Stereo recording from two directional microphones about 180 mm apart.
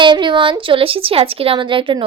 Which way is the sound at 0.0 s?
25° right (ahead or behind).